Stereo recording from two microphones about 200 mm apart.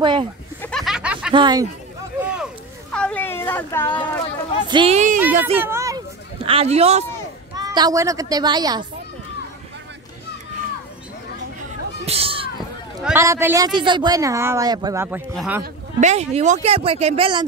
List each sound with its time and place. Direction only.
0.0 s speech: 25° right (ahead or behind)
0.6 s a sound: 5° left (ahead or behind)
1.3 s speech: 20° right (ahead or behind)
2.2 s a sound: 5° right (ahead or behind)
4.6 s speech: 25° right (ahead or behind)
4.9 s speech: 40° right (ahead or behind)
5.4 s speech: 10° right (ahead or behind)
6.4 s speech: 30° right (ahead or behind)
7.5 s speech: 20° right (ahead or behind)
12.1 s speech: 30° right (ahead or behind)
13.0 s speech: 15° right (ahead or behind)
15.6 s speech: 35° right (ahead or behind)